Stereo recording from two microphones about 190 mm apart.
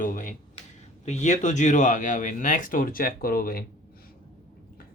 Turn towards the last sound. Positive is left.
turn(degrees=50)  # may be behind; listen again after turning